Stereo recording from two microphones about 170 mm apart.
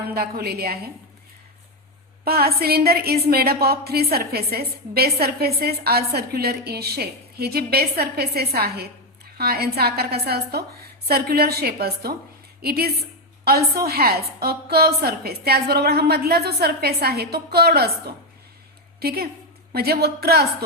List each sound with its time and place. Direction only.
0.1 s a woman's voice: 65° right (ahead or behind)
2.2 s a woman's voice: 65° right (ahead or behind)